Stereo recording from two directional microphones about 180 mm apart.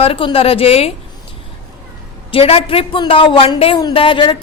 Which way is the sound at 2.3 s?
30° left (ahead or behind).